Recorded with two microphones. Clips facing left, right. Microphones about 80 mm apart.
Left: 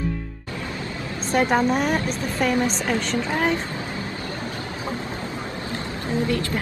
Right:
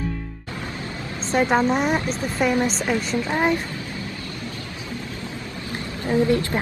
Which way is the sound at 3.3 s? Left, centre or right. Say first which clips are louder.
Right 2 dB; right.